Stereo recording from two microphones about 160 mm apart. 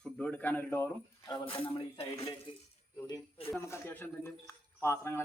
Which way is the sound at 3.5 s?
15° left (ahead or behind).